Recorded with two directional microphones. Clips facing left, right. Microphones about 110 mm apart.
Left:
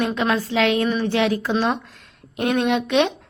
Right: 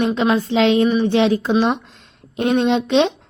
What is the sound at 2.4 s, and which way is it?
Speech, 25° right (ahead or behind).